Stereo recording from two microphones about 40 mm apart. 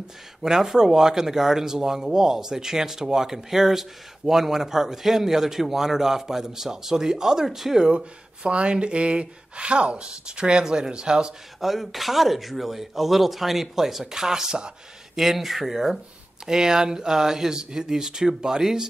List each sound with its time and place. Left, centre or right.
0.4 s a man's voice: centre
7.9 s speech: right
11.6 s speech: centre
15.1 s speech: centre
16.4 s a man's voice: centre